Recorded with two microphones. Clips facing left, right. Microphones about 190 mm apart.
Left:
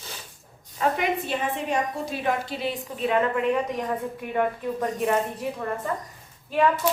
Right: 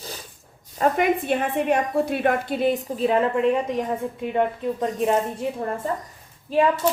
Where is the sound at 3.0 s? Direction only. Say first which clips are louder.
Even; 30° right (ahead or behind).